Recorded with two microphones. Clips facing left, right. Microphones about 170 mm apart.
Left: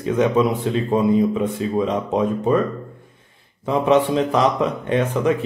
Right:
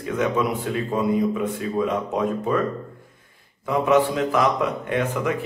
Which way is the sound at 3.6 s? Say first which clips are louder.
Left 2 dB; 30° left (ahead or behind).